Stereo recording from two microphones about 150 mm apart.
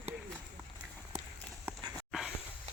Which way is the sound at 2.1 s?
5° right (ahead or behind).